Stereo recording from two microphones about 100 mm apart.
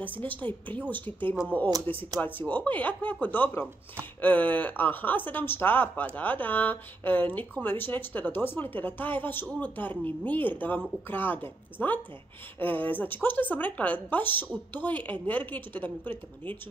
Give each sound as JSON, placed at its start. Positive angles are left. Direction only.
{"t": 0.0, "sound": "a woman's voice", "side_deg": 15}